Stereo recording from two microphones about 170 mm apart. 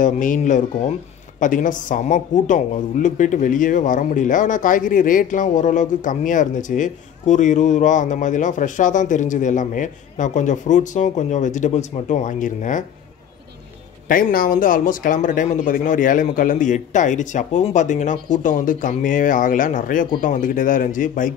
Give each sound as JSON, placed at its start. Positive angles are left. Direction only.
{"t": 0.0, "sound": "speech", "side_deg": 50}
{"t": 14.0, "sound": "speech", "side_deg": 55}